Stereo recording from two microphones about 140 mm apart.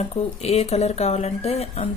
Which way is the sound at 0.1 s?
45° left (ahead or behind).